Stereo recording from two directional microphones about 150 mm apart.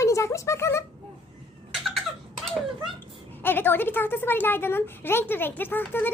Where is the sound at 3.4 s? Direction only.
15° left (ahead or behind).